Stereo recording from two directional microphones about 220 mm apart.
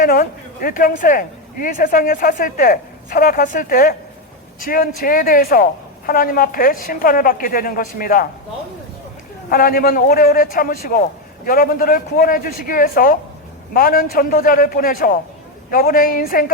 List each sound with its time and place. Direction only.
0.0 s speech: 40° left (ahead or behind)
9.5 s speech: 40° left (ahead or behind)